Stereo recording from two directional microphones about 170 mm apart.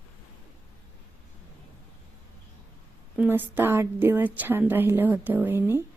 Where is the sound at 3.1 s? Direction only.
10° right (ahead or behind).